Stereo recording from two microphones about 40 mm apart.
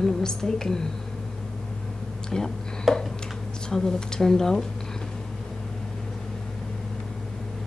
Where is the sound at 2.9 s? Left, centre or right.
Centre.